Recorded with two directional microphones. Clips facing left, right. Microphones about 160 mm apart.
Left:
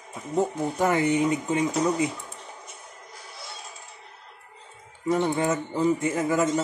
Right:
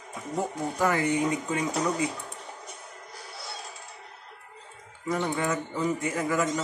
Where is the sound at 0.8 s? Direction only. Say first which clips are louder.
Left 3 dB; 20° left (ahead or behind).